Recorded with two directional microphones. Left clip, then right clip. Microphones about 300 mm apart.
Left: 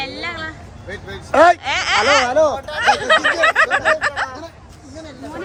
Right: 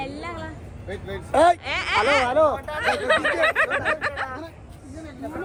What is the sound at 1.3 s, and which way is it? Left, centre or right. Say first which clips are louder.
Speech: left 6 dB; left.